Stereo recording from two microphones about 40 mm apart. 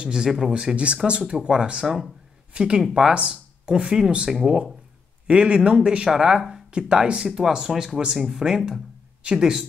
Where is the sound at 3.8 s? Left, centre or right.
Right.